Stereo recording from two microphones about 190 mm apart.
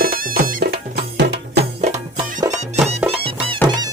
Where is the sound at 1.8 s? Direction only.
35° right (ahead or behind).